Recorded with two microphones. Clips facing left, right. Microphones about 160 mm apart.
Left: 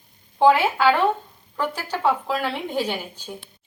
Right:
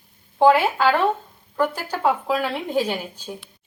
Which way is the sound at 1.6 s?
10° right (ahead or behind).